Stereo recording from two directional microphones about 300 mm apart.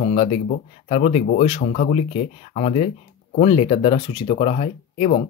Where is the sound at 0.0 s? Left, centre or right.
Left.